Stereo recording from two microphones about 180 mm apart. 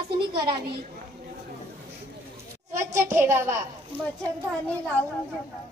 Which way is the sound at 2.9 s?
15° right (ahead or behind).